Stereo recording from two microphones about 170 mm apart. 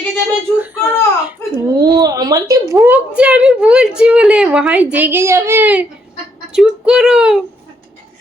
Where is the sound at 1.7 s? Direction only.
25° right (ahead or behind).